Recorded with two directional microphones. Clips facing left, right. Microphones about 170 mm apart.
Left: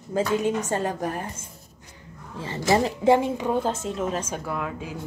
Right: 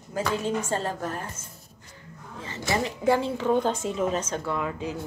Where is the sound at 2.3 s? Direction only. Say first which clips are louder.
Left 6 dB; 35° left (ahead or behind).